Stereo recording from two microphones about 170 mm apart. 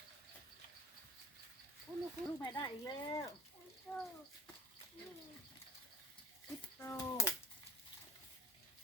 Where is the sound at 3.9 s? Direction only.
5° left (ahead or behind).